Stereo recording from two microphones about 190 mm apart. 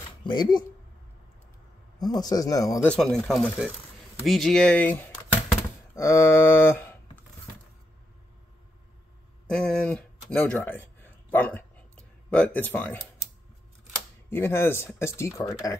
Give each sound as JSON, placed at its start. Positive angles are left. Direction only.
{"t": 0.2, "sound": "speech", "side_deg": 25}
{"t": 2.0, "sound": "speech", "side_deg": 20}
{"t": 2.9, "sound": "speech", "side_deg": 0}
{"t": 5.9, "sound": "a sound", "side_deg": 15}
{"t": 9.6, "sound": "speech", "side_deg": 5}
{"t": 11.2, "sound": "bow-wow", "side_deg": 10}
{"t": 14.3, "sound": "speech", "side_deg": 10}